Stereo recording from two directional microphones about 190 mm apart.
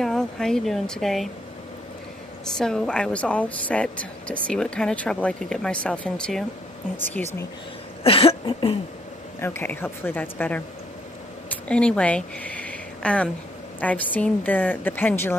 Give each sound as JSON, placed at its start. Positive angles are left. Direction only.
{"t": 0.0, "sound": "speech", "side_deg": 0}
{"t": 2.5, "sound": "a woman's voice", "side_deg": 5}
{"t": 8.0, "sound": "cough", "side_deg": 30}
{"t": 9.4, "sound": "a woman's voice", "side_deg": 10}
{"t": 11.6, "sound": "a woman's voice", "side_deg": 5}